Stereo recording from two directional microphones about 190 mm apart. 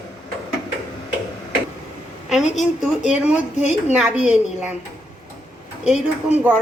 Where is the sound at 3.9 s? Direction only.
5° right (ahead or behind).